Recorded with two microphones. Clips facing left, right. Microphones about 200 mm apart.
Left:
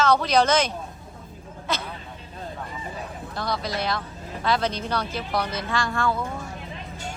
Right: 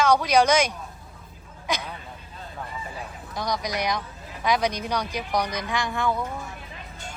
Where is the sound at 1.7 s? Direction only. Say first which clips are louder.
Even; 15° right (ahead or behind).